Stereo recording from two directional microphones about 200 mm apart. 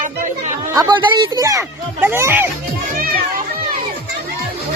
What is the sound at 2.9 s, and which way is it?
Children playing, 45° right (ahead or behind).